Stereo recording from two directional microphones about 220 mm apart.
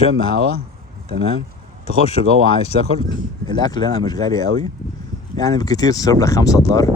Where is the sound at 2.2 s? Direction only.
35° right (ahead or behind).